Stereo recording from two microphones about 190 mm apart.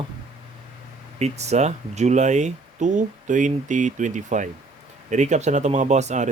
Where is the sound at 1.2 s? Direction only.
35° right (ahead or behind).